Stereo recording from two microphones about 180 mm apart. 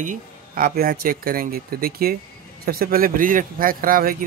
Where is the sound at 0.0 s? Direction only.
50° right (ahead or behind).